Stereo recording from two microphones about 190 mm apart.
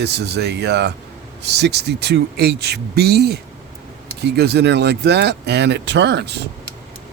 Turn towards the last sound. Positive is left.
turn(degrees=-60)  # may be behind; listen again after turning